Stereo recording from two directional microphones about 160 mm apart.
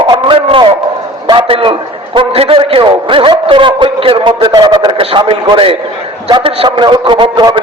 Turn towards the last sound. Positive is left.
turn(degrees=-30)  # may be behind; listen again after turning